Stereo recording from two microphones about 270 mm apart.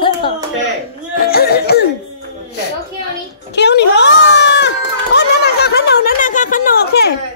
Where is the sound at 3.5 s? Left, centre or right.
Left.